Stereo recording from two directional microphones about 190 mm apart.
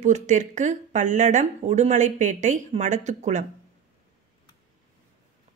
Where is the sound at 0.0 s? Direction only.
40° right (ahead or behind).